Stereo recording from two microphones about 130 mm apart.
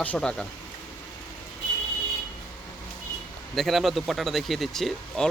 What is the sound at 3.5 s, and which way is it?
Speech, centre (ahead or behind).